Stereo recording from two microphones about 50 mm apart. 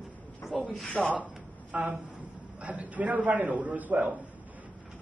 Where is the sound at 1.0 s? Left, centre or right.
Right.